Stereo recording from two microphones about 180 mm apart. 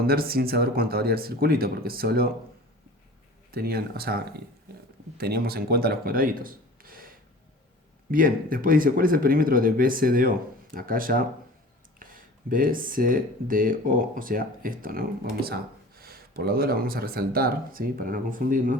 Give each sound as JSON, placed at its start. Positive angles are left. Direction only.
{"t": 0.0, "sound": "speech", "side_deg": -55}
{"t": 3.5, "sound": "speech", "side_deg": -60}
{"t": 8.1, "sound": "speech", "side_deg": -50}